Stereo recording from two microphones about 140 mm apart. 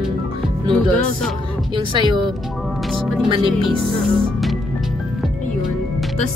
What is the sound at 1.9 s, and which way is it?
Speech, 35° right (ahead or behind).